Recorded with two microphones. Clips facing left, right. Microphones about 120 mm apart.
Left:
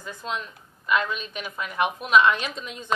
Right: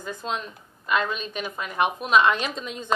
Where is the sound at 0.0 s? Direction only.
30° right (ahead or behind).